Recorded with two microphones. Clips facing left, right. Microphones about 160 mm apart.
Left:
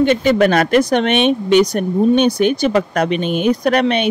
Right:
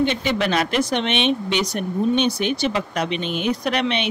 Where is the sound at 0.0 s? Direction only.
45° left (ahead or behind).